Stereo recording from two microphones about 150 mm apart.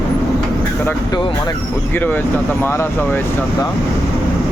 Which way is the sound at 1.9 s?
15° left (ahead or behind).